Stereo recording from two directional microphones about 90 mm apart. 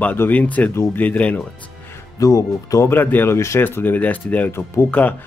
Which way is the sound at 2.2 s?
40° left (ahead or behind).